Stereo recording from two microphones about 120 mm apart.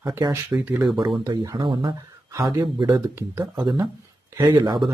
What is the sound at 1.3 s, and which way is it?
Speech, 40° right (ahead or behind).